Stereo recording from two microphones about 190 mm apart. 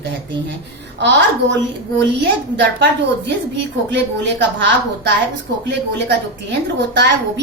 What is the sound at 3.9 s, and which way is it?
A woman's voice, 70° right (ahead or behind).